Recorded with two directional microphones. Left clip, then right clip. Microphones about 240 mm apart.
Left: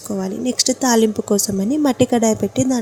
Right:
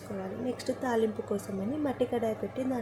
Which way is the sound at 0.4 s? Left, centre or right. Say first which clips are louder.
Left 15 dB; left.